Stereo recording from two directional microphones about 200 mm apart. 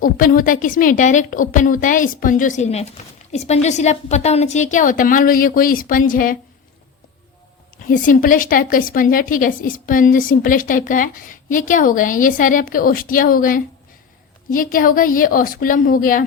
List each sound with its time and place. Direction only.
0.0 s a woman's voice: 45° left (ahead or behind)
7.9 s a woman's voice: 45° left (ahead or behind)